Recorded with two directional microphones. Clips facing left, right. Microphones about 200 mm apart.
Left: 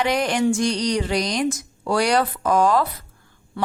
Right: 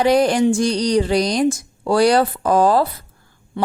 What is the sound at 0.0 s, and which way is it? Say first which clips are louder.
Speech: right 6 dB; 35° right (ahead or behind).